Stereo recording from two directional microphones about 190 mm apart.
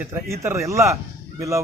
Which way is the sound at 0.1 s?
15° right (ahead or behind).